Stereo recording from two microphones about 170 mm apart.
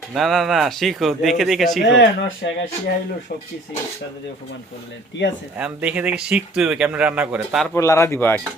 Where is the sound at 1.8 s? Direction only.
85° left.